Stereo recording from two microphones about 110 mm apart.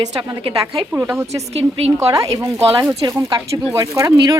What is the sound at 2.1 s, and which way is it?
Speech, 30° right (ahead or behind).